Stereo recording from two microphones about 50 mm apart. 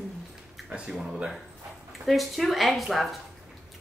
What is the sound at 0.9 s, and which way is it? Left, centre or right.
A woman's voice, centre.